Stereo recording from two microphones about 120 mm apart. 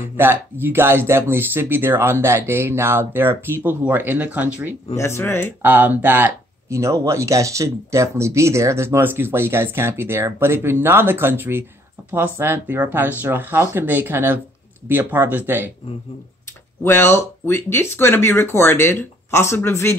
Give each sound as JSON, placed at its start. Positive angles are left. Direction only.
{"t": 0.2, "sound": "speech", "side_deg": -15}
{"t": 4.9, "sound": "speech", "side_deg": 20}
{"t": 5.6, "sound": "speech", "side_deg": -15}
{"t": 16.8, "sound": "speech", "side_deg": 20}